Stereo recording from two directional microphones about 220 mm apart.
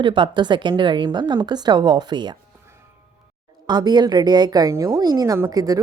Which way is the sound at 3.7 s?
20° right (ahead or behind).